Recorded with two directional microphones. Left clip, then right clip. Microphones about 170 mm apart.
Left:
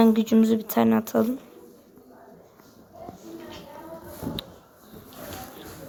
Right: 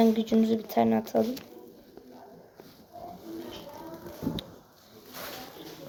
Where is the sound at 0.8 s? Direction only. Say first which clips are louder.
Left 2 dB; 65° left (ahead or behind).